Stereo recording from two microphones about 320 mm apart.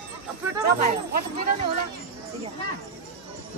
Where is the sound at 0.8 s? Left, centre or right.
Right.